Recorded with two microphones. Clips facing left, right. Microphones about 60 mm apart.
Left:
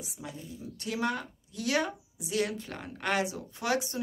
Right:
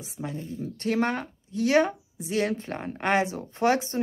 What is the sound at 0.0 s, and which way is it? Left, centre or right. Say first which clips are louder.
Speech: right 7 dB; right.